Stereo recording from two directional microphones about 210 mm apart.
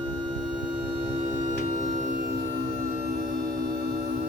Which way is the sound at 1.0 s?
30° right (ahead or behind).